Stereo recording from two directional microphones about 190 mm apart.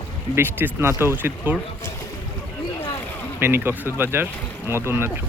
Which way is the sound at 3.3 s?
10° right (ahead or behind).